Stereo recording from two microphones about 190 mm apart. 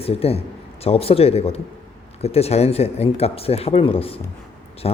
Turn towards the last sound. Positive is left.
turn(degrees=30)  # may be behind; listen again after turning